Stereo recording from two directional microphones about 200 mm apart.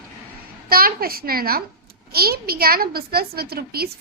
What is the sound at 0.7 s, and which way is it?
A woman's voice, 50° right (ahead or behind).